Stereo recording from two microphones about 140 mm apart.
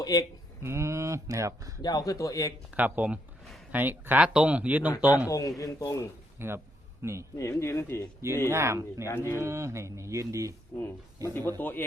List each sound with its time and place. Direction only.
0.0 s speech: 25° left (ahead or behind)
0.6 s speech: 20° right (ahead or behind)
1.8 s speech: 25° left (ahead or behind)
2.7 s speech: 10° right (ahead or behind)
5.3 s speech: 25° left (ahead or behind)
6.4 s a man's voice: 15° right (ahead or behind)
7.3 s speech: 20° left (ahead or behind)
8.4 s speech: 20° right (ahead or behind)
9.0 s speech: 15° left (ahead or behind)
9.4 s speech: 20° right (ahead or behind)
10.8 s speech: 15° left (ahead or behind)